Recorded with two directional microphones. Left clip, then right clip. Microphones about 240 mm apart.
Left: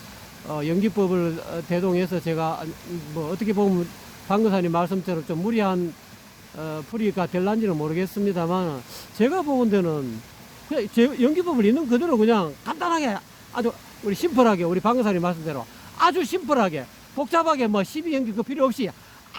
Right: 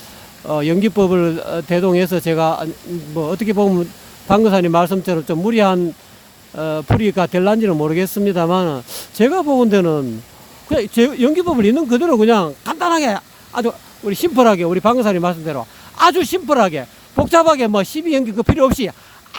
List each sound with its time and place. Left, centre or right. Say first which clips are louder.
0.4 s speech: right 9 dB; right